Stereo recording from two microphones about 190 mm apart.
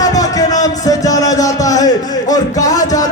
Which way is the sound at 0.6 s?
20° left (ahead or behind).